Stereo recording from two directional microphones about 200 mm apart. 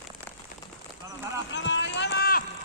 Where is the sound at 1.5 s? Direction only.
65° left (ahead or behind); by 2.4 s 50° left (ahead or behind).